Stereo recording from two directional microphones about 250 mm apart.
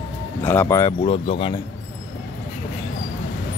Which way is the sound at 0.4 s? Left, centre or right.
Centre.